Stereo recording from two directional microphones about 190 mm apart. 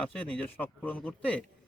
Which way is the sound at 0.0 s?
5° left (ahead or behind).